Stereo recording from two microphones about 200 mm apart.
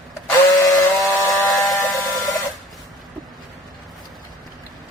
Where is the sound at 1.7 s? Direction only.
15° left (ahead or behind).